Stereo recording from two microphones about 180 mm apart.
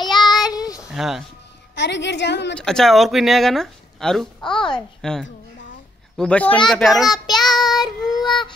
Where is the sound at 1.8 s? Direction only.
75° left (ahead or behind).